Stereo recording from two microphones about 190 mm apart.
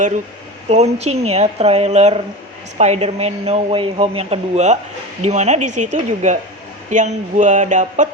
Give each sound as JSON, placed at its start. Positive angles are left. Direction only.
{"t": 0.7, "sound": "speech", "side_deg": -35}